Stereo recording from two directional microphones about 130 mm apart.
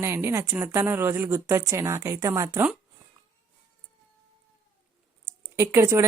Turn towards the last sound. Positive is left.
turn(degrees=-20)  # may be behind; listen again after turning